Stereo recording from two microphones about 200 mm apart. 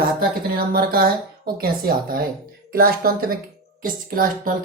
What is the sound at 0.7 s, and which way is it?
Speech, 50° right (ahead or behind).